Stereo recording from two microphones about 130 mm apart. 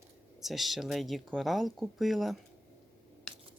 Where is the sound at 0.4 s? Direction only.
Centre (ahead or behind).